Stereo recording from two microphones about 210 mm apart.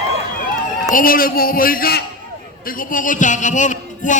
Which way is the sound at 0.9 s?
45° left (ahead or behind).